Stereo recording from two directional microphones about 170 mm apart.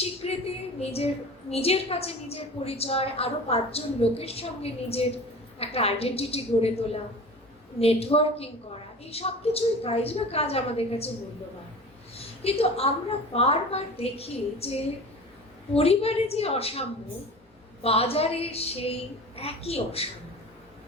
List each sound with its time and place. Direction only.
0.0 s a woman's voice: 35° left (ahead or behind)
12.1 s a woman's voice: 35° left (ahead or behind)
17.8 s a woman's voice: 35° left (ahead or behind)